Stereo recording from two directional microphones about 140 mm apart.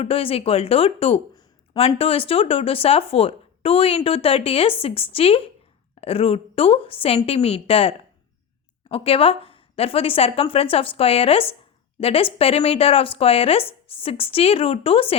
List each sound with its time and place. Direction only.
0.0 s speech: 45° left (ahead or behind)